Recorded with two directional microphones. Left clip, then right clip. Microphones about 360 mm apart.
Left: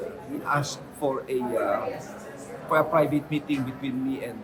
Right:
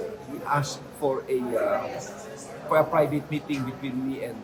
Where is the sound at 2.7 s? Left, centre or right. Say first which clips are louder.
Even; centre.